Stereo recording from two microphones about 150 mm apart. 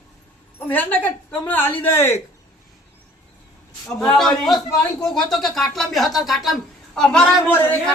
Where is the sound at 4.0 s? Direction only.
5° left (ahead or behind).